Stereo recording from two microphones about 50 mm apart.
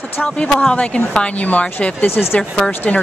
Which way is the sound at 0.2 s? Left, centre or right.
Left.